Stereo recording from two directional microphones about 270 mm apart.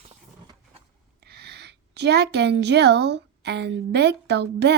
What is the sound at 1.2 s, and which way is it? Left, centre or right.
A woman's voice, right.